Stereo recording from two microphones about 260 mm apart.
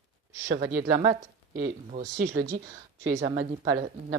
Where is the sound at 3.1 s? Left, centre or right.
Right.